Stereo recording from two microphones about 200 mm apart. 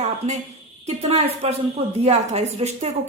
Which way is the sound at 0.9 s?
30° right (ahead or behind).